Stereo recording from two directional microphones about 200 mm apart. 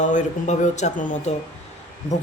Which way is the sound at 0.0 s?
40° left (ahead or behind).